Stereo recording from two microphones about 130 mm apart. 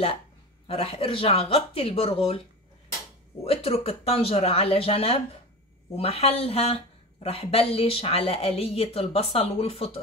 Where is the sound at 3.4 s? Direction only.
50° left (ahead or behind).